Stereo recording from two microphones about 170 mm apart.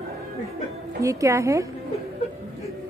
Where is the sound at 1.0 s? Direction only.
20° right (ahead or behind).